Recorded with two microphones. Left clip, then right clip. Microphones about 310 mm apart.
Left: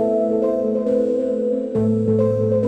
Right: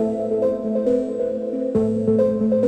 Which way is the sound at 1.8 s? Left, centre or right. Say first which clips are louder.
Right 4 dB; centre.